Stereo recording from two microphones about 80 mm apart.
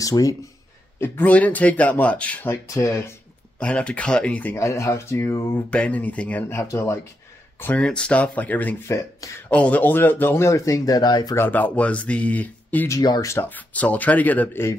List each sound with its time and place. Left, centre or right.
0.0 s speech: left
0.9 s speech: left
2.5 s speech: left
3.5 s speech: centre
4.6 s speech: left
5.7 s speech: centre
6.6 s speech: left
7.7 s speech: centre
8.8 s speech: left
9.5 s speech: centre; by 11.3 s left
11.3 s speech: left
13.0 s speech: left
13.3 s speech: left